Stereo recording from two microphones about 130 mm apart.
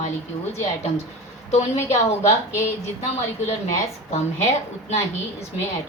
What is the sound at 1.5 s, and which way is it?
Speech, 60° left (ahead or behind).